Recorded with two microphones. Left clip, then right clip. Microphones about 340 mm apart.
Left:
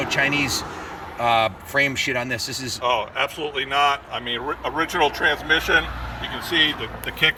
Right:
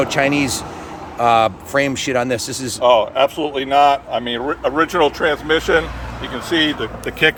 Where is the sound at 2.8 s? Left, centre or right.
Right.